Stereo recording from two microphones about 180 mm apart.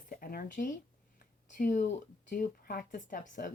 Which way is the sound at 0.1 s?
55° left (ahead or behind).